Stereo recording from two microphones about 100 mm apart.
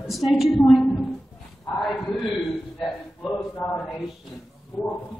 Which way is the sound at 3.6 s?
20° left (ahead or behind).